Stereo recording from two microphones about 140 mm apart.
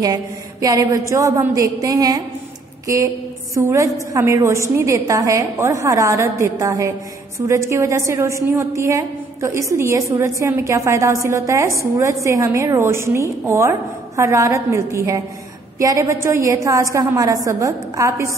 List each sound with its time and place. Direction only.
0.0 s a woman's voice: 25° right (ahead or behind)